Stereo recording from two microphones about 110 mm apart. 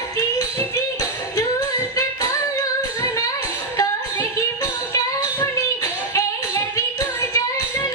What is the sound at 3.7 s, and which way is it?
Music, 35° left (ahead or behind).